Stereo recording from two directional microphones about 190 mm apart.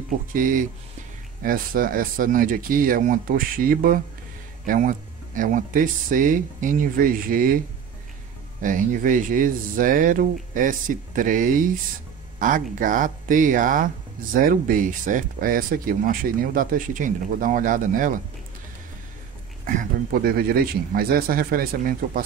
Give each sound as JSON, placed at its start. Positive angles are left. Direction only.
{"t": 0.3, "sound": "speech", "side_deg": -45}
{"t": 19.6, "sound": "speech", "side_deg": -50}